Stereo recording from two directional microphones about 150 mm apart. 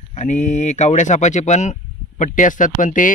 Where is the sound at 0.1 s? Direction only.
50° left (ahead or behind).